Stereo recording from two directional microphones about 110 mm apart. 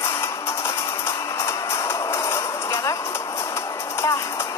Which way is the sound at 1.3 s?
25° left (ahead or behind).